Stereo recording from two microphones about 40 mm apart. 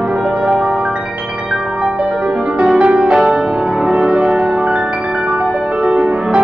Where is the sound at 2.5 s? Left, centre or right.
Right.